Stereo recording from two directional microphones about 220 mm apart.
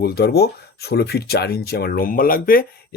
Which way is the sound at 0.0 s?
45° left (ahead or behind).